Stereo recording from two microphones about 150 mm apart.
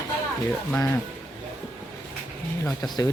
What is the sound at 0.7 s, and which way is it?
Speech, 10° left (ahead or behind).